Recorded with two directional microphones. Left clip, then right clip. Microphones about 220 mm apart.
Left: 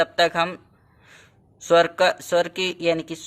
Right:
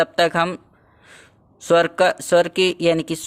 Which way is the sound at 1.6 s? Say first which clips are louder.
Right 1 dB; 35° right (ahead or behind).